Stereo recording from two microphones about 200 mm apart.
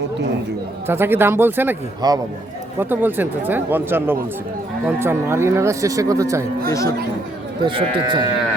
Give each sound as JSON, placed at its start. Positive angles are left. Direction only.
{"t": 0.9, "sound": "speech", "side_deg": -10}
{"t": 6.7, "sound": "speech", "side_deg": 15}
{"t": 7.6, "sound": "speech", "side_deg": -25}